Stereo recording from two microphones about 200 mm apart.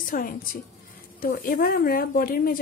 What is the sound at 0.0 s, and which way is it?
A woman's voice, 45° left (ahead or behind).